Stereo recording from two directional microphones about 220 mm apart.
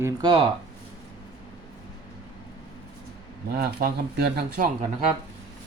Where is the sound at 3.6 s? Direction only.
45° right (ahead or behind).